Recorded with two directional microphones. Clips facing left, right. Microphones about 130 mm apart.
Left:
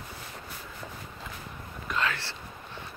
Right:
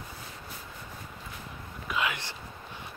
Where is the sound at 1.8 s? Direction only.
10° right (ahead or behind).